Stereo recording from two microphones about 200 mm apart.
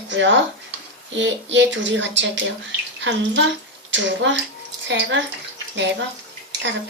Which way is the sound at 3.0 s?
65° right (ahead or behind).